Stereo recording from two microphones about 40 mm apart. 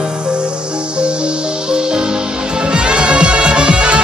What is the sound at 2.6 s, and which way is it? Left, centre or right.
Music, right.